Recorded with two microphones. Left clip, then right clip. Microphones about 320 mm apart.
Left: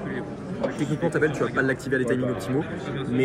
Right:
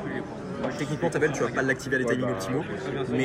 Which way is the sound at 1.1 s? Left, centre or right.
Centre.